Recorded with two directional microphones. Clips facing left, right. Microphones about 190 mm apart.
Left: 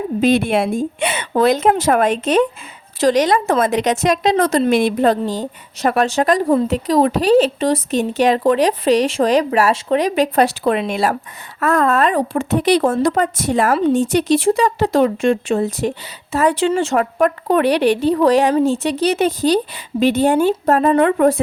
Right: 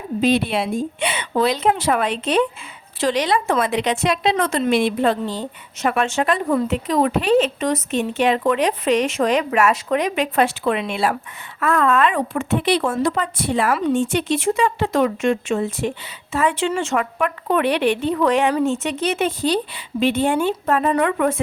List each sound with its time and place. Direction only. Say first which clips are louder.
0.2 s a woman's voice: left 3 dB; 50° left (ahead or behind)